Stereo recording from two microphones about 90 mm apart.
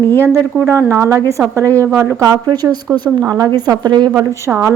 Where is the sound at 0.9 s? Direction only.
35° right (ahead or behind); by 4.1 s 55° right (ahead or behind).